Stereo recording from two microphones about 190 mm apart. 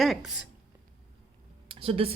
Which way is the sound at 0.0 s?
Centre (ahead or behind).